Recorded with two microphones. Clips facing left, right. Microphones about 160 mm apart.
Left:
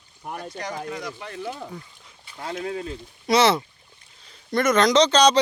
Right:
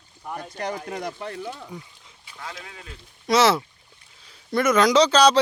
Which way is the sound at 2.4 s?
35° left (ahead or behind).